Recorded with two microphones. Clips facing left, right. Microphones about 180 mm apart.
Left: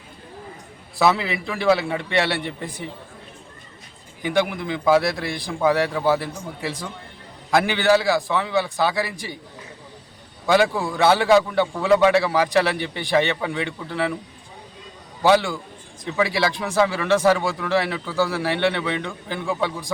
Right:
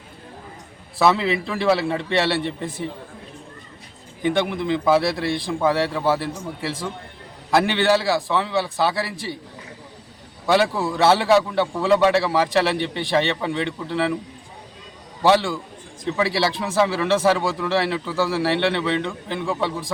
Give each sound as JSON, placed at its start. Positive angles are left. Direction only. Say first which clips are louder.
{"t": 0.9, "sound": "a man's voice", "louder": "right 2 dB", "side_deg": 0}
{"t": 4.6, "sound": "a man's voice", "louder": "right 2 dB", "side_deg": 0}
{"t": 10.4, "sound": "a man's voice", "louder": "even", "side_deg": 0}
{"t": 12.7, "sound": "a man's voice", "louder": "right 4 dB", "side_deg": -30}
{"t": 13.0, "sound": "a man's voice", "louder": "left 3 dB", "side_deg": 0}
{"t": 15.2, "sound": "a man's voice", "louder": "even", "side_deg": 0}